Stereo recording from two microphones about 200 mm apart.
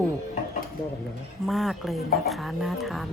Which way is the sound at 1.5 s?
Centre (ahead or behind).